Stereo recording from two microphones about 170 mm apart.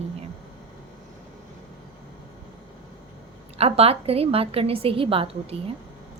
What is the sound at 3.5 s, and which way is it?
Speech, 35° right (ahead or behind).